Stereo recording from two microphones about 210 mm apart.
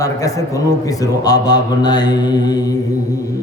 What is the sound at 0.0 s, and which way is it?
A man's voice, 15° left (ahead or behind).